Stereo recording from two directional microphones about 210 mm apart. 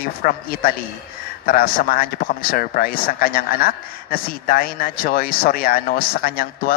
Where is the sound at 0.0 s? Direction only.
45° left (ahead or behind).